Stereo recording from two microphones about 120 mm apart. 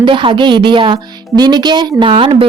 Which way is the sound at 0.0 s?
45° right (ahead or behind).